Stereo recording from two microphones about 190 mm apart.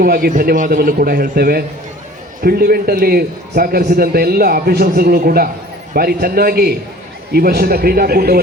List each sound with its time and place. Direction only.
0.0 s a man's voice: 50° right (ahead or behind)